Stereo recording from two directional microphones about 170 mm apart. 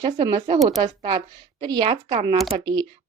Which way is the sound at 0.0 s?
25° right (ahead or behind).